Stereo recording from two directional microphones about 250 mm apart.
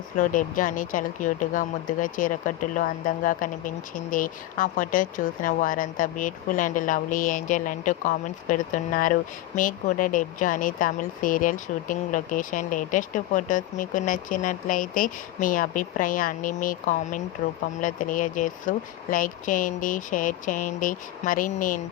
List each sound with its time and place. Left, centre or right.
0.2 s speech: left